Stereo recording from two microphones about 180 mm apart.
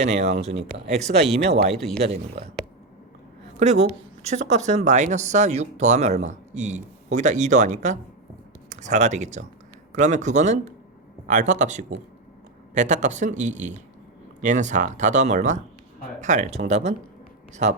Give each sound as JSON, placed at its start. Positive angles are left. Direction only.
{"t": 0.0, "sound": "speech", "side_deg": -40}
{"t": 1.7, "sound": "speech", "side_deg": 0}
{"t": 2.0, "sound": "speech", "side_deg": -35}
{"t": 3.6, "sound": "a woman's voice", "side_deg": -40}